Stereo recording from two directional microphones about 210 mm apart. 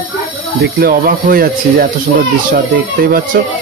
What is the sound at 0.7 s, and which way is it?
Speech, 45° right (ahead or behind).